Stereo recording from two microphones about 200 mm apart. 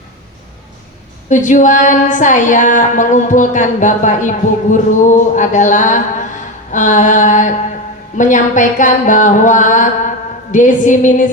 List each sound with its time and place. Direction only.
1.3 s a woman's voice: 40° left (ahead or behind)